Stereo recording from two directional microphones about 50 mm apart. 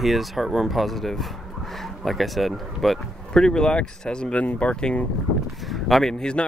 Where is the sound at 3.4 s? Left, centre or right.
Centre.